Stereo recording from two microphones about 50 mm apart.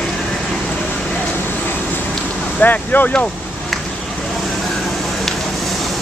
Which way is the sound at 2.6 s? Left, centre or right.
Left.